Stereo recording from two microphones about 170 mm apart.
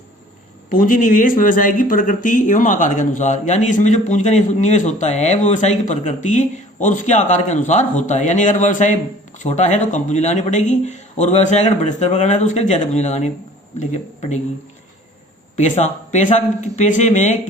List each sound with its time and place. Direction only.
0.7 s speech: 50° left (ahead or behind)
15.5 s speech: 45° left (ahead or behind)